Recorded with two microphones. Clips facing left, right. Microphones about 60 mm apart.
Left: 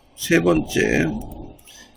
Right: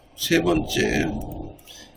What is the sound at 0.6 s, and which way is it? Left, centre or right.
Speech, left.